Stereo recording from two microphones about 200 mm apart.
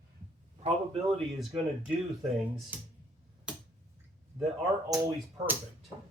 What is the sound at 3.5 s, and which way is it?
Finger snapping, 5° right (ahead or behind).